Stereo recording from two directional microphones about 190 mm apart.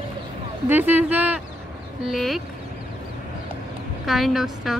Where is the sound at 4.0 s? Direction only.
Centre (ahead or behind).